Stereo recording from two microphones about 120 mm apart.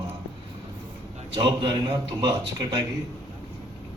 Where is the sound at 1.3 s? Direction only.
40° right (ahead or behind).